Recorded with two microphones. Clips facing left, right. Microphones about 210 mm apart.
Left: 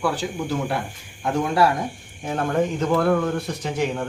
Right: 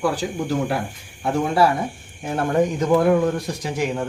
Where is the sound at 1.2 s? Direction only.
5° right (ahead or behind).